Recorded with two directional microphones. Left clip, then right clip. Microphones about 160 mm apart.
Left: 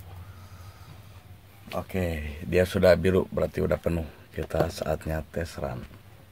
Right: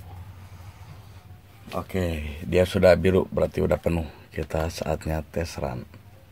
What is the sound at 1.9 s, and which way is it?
Speech, centre (ahead or behind).